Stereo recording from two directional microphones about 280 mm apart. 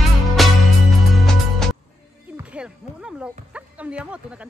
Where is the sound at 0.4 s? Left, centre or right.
Centre.